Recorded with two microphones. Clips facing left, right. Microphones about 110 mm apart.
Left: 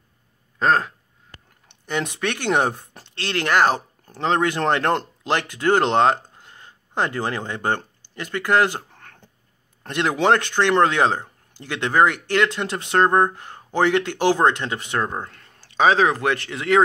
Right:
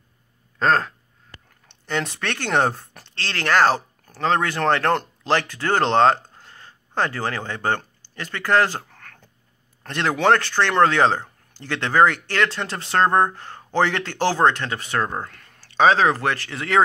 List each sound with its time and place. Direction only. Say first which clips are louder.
0.6 s speech: even; 10° left (ahead or behind)